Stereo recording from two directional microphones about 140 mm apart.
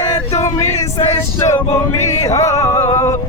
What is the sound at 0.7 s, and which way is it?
Male singing, 55° left (ahead or behind).